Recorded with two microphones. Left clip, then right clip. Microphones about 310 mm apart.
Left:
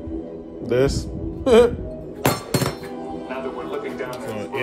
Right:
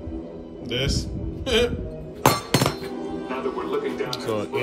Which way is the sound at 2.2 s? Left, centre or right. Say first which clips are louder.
Right 2 dB; centre.